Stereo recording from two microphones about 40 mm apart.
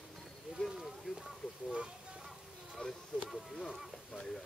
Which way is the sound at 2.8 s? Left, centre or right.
Centre.